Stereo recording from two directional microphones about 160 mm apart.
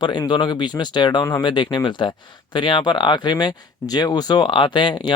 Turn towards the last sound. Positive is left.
turn(degrees=30)  # may be behind; listen again after turning